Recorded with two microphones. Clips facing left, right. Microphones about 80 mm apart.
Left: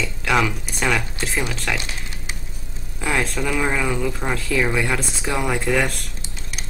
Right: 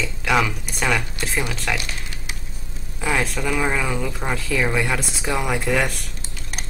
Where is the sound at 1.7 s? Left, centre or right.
Left.